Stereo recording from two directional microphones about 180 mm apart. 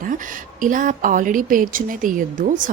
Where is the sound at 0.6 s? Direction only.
45° right (ahead or behind).